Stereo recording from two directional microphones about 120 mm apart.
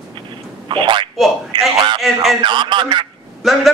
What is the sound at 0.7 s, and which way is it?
Telephone, 40° right (ahead or behind).